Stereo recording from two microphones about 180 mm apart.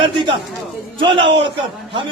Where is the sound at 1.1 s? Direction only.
90° right.